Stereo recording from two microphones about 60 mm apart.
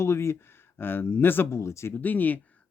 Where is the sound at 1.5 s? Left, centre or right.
Left.